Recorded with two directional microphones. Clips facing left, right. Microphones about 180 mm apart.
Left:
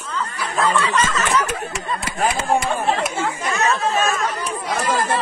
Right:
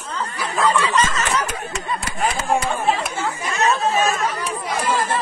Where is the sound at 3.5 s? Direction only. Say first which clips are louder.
Right 2 dB; 35° right (ahead or behind).